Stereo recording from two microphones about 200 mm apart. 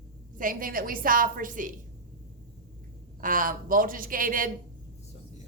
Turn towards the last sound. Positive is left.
turn(degrees=-45)  # may be behind; listen again after turning